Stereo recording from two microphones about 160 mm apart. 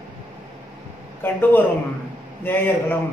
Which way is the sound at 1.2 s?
15° left (ahead or behind).